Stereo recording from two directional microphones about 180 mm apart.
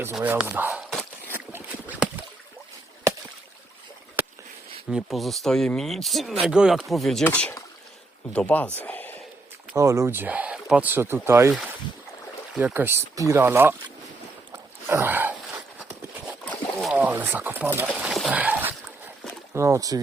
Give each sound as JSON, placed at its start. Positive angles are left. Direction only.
{"t": 0.0, "sound": "speech", "side_deg": -10}
{"t": 0.9, "sound": "a sound", "side_deg": 5}
{"t": 4.9, "sound": "speech", "side_deg": -5}
{"t": 8.8, "sound": "a sound", "side_deg": 10}
{"t": 9.7, "sound": "speech", "side_deg": -15}
{"t": 12.5, "sound": "speech", "side_deg": -10}
{"t": 14.5, "sound": "a sound", "side_deg": -10}
{"t": 16.5, "sound": "boat", "side_deg": 0}
{"t": 17.0, "sound": "speech", "side_deg": -10}